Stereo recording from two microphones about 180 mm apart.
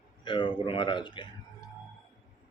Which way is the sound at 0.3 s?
25° left (ahead or behind).